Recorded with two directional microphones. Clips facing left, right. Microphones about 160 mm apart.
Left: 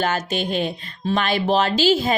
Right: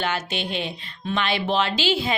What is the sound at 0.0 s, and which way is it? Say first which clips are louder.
Speech: left 4 dB; 45° left (ahead or behind).